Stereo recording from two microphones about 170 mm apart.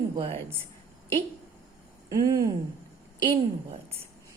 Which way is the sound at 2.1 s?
20° right (ahead or behind).